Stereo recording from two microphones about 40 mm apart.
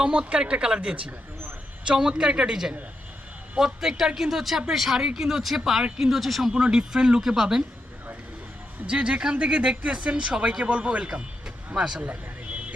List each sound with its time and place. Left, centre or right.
0.0 s speech: right
3.6 s speech: centre
6.5 s speech: centre
8.9 s a man's voice: right
11.8 s speech: centre
12.0 s vehicle: right